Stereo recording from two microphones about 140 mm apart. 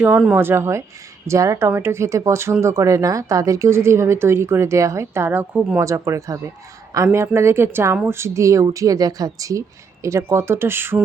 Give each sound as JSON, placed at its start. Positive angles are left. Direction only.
{"t": 0.0, "sound": "speech", "side_deg": -10}
{"t": 5.8, "sound": "speech", "side_deg": -20}